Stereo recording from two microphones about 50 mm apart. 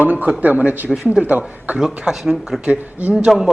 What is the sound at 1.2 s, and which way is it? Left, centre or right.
Speech, right.